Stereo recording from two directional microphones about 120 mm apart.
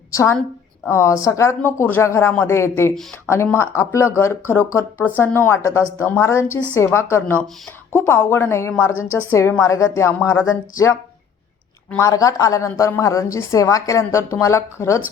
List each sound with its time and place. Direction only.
0.1 s a woman's voice: 25° left (ahead or behind)
11.9 s a woman's voice: 25° left (ahead or behind)